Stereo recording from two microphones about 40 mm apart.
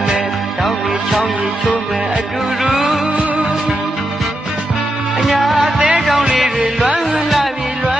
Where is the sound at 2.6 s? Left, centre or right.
Centre.